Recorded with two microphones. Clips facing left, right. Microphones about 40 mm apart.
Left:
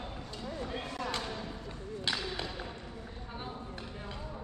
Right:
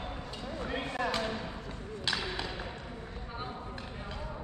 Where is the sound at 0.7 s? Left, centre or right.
Right.